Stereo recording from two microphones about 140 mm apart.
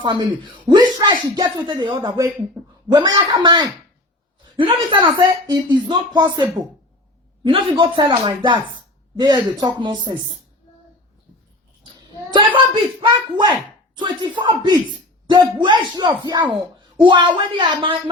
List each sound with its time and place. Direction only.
0.0 s speech: 35° right (ahead or behind)
7.4 s a woman's voice: 35° right (ahead or behind)
12.3 s speech: 35° right (ahead or behind)